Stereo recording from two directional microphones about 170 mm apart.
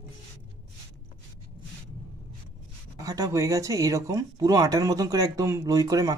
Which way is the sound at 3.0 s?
20° right (ahead or behind).